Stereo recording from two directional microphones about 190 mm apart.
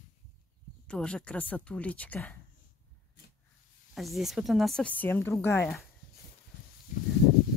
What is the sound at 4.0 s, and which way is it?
Speech, centre (ahead or behind).